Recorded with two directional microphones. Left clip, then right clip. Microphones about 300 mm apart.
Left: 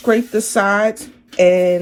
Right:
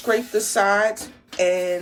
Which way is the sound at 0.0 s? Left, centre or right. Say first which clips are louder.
Left 5 dB; centre.